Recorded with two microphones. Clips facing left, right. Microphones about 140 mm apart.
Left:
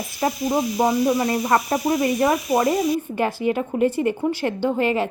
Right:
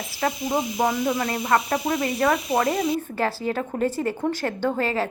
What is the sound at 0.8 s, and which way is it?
A woman's voice, 20° left (ahead or behind).